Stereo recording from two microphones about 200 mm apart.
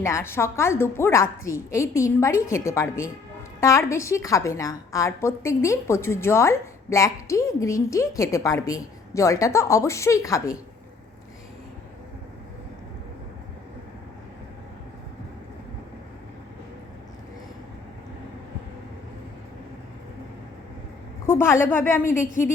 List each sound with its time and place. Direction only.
0.0 s a woman's voice: 15° left (ahead or behind)
21.2 s a woman's voice: 10° left (ahead or behind)
22.2 s a woman's voice: 40° left (ahead or behind)